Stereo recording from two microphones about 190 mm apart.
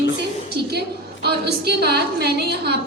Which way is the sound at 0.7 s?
60° right (ahead or behind).